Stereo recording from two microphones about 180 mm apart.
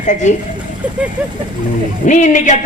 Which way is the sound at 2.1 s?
45° left (ahead or behind).